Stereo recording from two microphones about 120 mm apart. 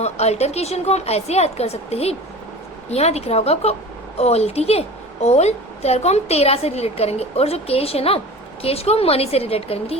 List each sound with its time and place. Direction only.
0.0 s a woman's voice: 65° left (ahead or behind)